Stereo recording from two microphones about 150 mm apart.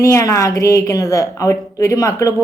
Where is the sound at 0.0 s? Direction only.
20° left (ahead or behind).